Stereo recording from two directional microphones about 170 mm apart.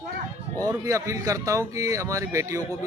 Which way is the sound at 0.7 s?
20° right (ahead or behind).